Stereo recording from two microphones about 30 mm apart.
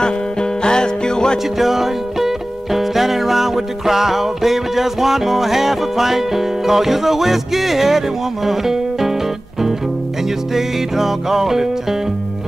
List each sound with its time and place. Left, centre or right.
0.0 s music: left
1.6 s music: centre
8.5 s speech: centre
10.5 s music: centre